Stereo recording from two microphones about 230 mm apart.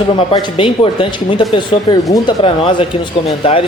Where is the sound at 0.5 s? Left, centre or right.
Left.